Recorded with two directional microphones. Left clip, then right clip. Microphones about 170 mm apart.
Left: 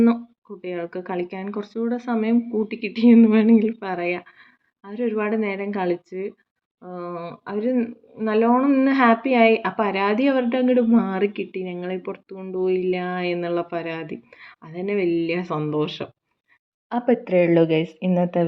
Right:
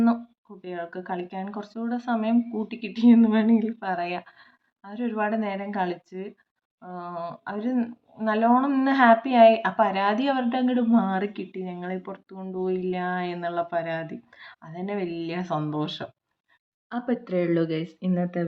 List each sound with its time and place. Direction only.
0.6 s speech: 20° left (ahead or behind)